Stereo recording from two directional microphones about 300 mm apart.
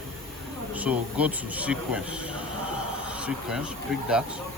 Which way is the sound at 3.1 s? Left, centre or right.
Centre.